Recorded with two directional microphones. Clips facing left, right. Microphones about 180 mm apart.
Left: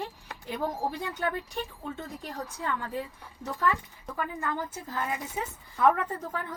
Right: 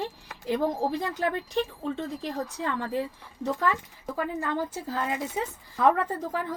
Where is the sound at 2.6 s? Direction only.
30° right (ahead or behind).